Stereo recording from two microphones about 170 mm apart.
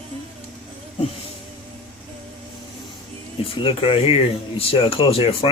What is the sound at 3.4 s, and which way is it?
Speech, 30° left (ahead or behind).